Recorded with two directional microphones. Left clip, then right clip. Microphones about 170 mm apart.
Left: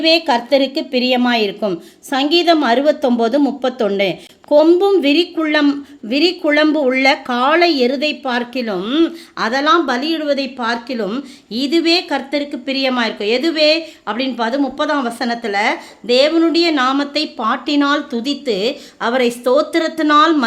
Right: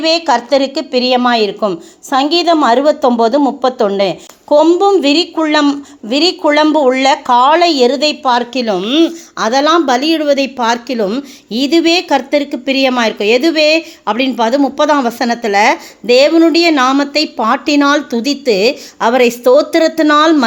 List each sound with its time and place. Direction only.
0.0 s a woman's voice: 5° right (ahead or behind)
9.5 s a woman's voice: 25° right (ahead or behind)